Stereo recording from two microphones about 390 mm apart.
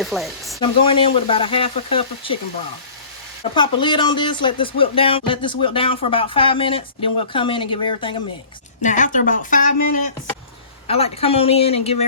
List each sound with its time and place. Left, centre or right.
0.0 s speech: centre
0.6 s speech: centre
3.5 s speech: centre